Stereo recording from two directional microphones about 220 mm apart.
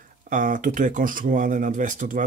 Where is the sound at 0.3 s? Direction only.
35° right (ahead or behind).